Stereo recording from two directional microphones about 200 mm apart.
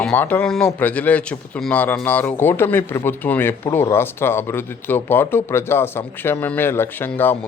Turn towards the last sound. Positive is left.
turn(degrees=10)  # may be behind; listen again after turning